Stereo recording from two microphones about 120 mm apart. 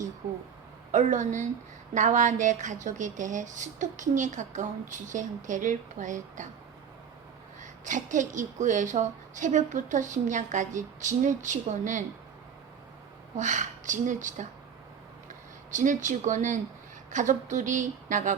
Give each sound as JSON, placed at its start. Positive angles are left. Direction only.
{"t": 0.9, "sound": "speech", "side_deg": -90}
{"t": 7.6, "sound": "speech", "side_deg": -90}
{"t": 13.3, "sound": "speech", "side_deg": -90}
{"t": 15.7, "sound": "speech", "side_deg": -90}